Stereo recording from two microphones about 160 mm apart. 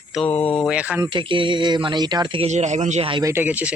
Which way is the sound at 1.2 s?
30° right (ahead or behind).